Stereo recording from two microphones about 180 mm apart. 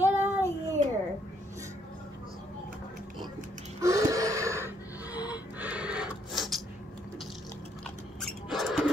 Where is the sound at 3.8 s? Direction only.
15° right (ahead or behind).